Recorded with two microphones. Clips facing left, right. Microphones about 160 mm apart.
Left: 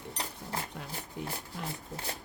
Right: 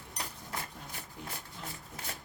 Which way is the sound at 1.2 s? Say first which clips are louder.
Left 8 dB; 65° left (ahead or behind).